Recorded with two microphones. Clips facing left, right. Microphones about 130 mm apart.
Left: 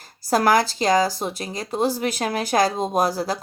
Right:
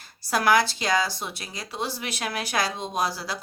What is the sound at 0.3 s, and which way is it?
Speech, 40° left (ahead or behind).